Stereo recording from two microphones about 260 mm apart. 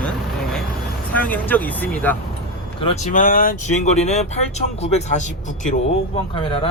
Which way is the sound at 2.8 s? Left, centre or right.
Left.